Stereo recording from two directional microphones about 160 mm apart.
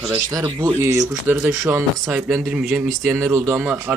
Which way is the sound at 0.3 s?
20° right (ahead or behind).